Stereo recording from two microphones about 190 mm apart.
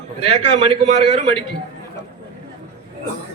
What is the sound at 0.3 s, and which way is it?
A man's voice, 30° right (ahead or behind).